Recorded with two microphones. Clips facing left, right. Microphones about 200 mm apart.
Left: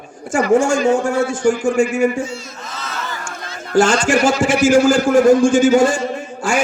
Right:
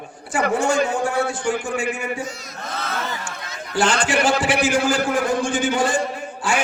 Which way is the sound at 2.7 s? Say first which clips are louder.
Right 3 dB; 55° right (ahead or behind).